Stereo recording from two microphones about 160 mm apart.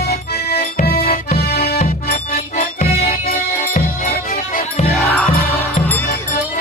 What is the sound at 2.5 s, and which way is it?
Music, 40° left (ahead or behind).